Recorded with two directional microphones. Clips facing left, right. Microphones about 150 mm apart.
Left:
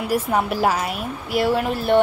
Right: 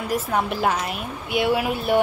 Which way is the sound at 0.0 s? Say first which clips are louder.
Left 3 dB; 10° left (ahead or behind).